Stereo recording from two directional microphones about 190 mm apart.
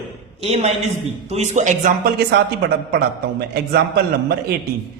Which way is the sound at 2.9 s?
55° right (ahead or behind).